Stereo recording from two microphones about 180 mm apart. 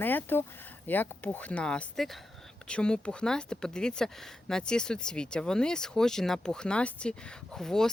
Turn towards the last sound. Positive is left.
turn(degrees=5)  # may be behind; listen again after turning